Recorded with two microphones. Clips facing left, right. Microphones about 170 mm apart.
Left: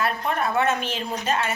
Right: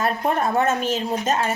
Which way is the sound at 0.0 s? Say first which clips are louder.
Right 3 dB; 40° right (ahead or behind).